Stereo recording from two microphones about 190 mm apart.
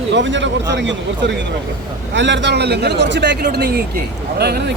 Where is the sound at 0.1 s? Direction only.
70° right (ahead or behind).